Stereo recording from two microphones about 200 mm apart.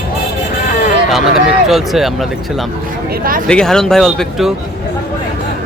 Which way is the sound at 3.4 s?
5° left (ahead or behind).